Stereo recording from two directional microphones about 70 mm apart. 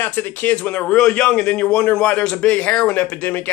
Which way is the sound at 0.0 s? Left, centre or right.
Left.